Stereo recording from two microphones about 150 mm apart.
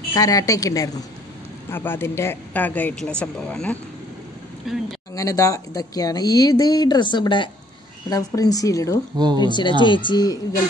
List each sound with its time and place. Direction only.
0.1 s a man's voice: 25° left (ahead or behind); by 4.8 s centre (ahead or behind)
5.1 s speech: 25° left (ahead or behind)